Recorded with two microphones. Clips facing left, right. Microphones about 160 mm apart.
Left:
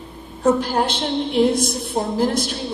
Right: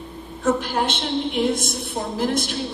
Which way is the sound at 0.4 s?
35° left (ahead or behind).